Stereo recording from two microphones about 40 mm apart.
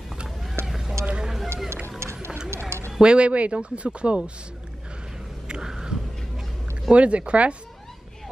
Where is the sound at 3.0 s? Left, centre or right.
Right.